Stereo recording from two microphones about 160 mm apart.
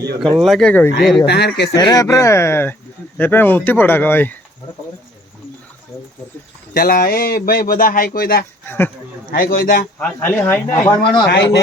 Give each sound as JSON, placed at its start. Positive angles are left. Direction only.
{"t": 0.3, "sound": "speech", "side_deg": 0}
{"t": 1.3, "sound": "speech", "side_deg": 90}
{"t": 1.7, "sound": "speech", "side_deg": 25}
{"t": 6.7, "sound": "speech", "side_deg": 65}
{"t": 8.6, "sound": "speech", "side_deg": 15}
{"t": 9.3, "sound": "a man's voice", "side_deg": 65}
{"t": 10.0, "sound": "speech", "side_deg": 15}
{"t": 11.3, "sound": "speech", "side_deg": 90}